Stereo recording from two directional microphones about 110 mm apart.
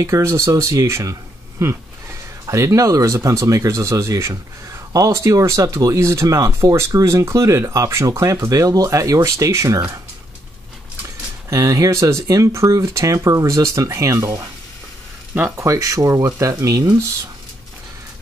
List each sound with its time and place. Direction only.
0.0 s speech: 30° right (ahead or behind)
11.5 s speech: 30° right (ahead or behind)
15.3 s speech: 20° right (ahead or behind)